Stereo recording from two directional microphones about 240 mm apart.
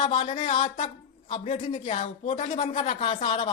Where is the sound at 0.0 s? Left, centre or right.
Left.